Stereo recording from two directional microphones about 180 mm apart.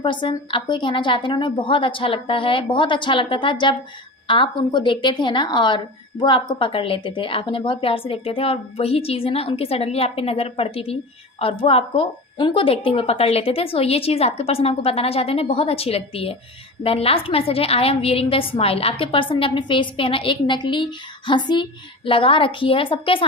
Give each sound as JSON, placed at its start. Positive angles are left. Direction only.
{"t": 0.0, "sound": "a woman's voice", "side_deg": 25}